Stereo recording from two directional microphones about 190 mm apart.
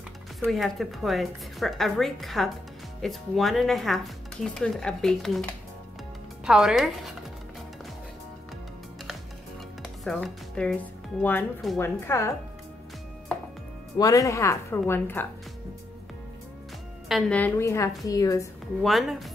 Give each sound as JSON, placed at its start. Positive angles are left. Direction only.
{"t": 0.4, "sound": "speech", "side_deg": 0}
{"t": 6.4, "sound": "speech", "side_deg": 0}
{"t": 10.0, "sound": "speech", "side_deg": 5}
{"t": 13.9, "sound": "speech", "side_deg": 20}
{"t": 17.1, "sound": "speech", "side_deg": 5}
{"t": 18.8, "sound": "speech", "side_deg": 0}